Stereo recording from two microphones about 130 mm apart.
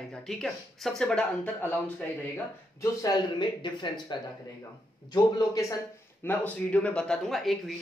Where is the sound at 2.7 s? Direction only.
25° left (ahead or behind).